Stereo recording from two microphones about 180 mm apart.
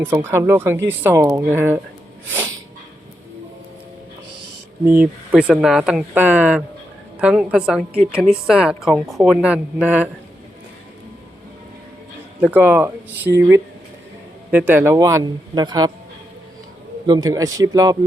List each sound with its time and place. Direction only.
0.0 s speech: 10° right (ahead or behind)
4.9 s a woman's voice: 10° right (ahead or behind)
12.4 s speech: 10° right (ahead or behind)
17.1 s speech: 20° right (ahead or behind)